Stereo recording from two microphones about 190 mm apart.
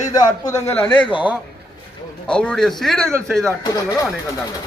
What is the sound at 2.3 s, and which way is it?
Speech, 5° left (ahead or behind).